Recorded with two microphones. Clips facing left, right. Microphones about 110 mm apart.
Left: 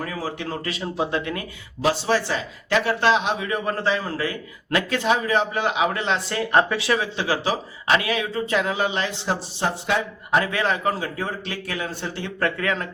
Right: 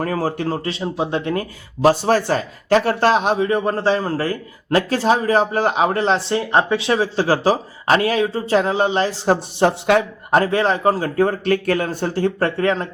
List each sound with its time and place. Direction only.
0.0 s speech: 45° right (ahead or behind); by 1.2 s 20° right (ahead or behind)
1.2 s speech: 35° right (ahead or behind)
9.6 s speech: 65° right (ahead or behind)
10.3 s speech: 35° right (ahead or behind)